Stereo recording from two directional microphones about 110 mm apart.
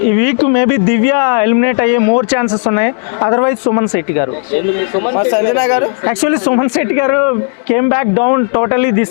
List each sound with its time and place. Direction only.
0.1 s speech: 15° left (ahead or behind)